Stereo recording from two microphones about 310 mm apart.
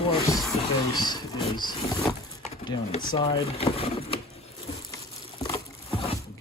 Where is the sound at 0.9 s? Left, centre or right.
Centre.